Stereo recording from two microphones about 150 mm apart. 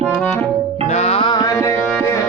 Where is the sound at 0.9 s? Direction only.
45° left (ahead or behind).